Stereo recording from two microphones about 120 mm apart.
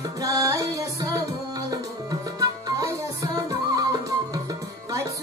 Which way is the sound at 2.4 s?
30° right (ahead or behind).